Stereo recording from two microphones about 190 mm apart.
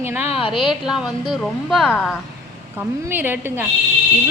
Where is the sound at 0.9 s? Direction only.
5° right (ahead or behind).